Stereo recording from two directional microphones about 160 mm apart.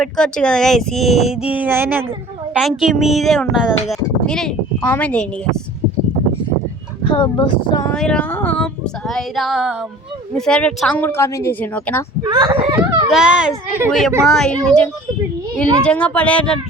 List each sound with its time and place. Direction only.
0.0 s speech: 5° left (ahead or behind); by 2.6 s 10° right (ahead or behind)
2.6 s speech: centre (ahead or behind)
7.0 s speech: 30° left (ahead or behind)
7.9 s speech: 5° left (ahead or behind)
12.2 s a child's voice: 30° right (ahead or behind)
13.1 s speech: 5° right (ahead or behind)
14.3 s speech: 5° left (ahead or behind)